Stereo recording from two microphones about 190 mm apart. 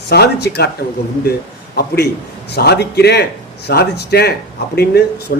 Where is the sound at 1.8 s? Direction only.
60° left (ahead or behind).